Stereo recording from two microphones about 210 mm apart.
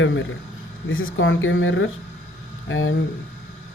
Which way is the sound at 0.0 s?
65° left (ahead or behind).